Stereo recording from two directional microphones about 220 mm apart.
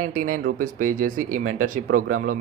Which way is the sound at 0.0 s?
40° right (ahead or behind).